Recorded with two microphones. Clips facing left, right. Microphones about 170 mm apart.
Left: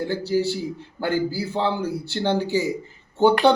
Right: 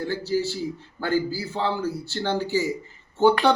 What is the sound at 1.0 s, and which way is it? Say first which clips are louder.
A man's voice: left 1 dB; 20° left (ahead or behind).